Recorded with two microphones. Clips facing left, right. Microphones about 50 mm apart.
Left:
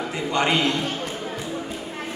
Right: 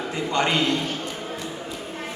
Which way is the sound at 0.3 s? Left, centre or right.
Left.